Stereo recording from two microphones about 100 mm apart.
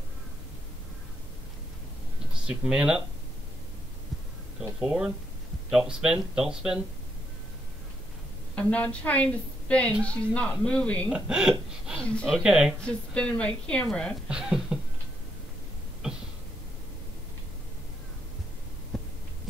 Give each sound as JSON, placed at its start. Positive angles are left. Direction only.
{"t": 2.4, "sound": "speech", "side_deg": -10}
{"t": 4.7, "sound": "speech", "side_deg": -5}
{"t": 8.5, "sound": "a woman's voice", "side_deg": 15}
{"t": 11.1, "sound": "speech", "side_deg": -10}
{"t": 12.0, "sound": "a woman's voice", "side_deg": 10}
{"t": 12.3, "sound": "speech", "side_deg": -5}
{"t": 12.8, "sound": "a woman's voice", "side_deg": 10}
{"t": 14.3, "sound": "speech", "side_deg": -10}
{"t": 16.0, "sound": "a sound", "side_deg": -10}
{"t": 18.9, "sound": "heart sounds", "side_deg": 0}